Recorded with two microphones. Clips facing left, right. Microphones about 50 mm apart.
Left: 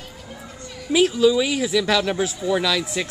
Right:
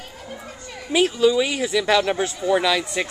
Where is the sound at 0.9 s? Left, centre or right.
Centre.